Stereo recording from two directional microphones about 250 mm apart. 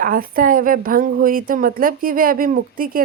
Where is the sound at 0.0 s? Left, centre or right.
Right.